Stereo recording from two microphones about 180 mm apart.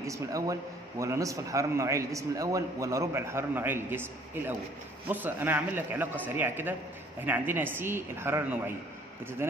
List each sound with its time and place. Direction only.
0.0 s a man's voice: 20° right (ahead or behind)